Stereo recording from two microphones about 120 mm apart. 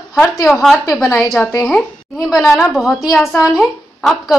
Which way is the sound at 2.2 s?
5° right (ahead or behind).